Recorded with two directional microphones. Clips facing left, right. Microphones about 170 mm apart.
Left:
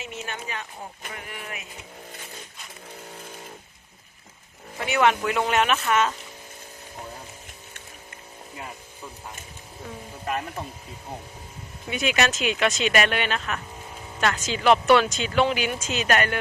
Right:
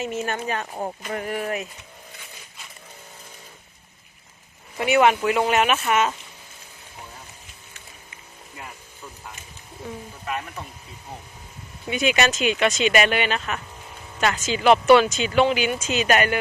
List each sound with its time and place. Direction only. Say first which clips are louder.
0.0 s speech: right 8 dB; 45° right (ahead or behind)
4.8 s speech: right 4 dB; 15° right (ahead or behind)
11.9 s speech: right 3 dB; centre (ahead or behind)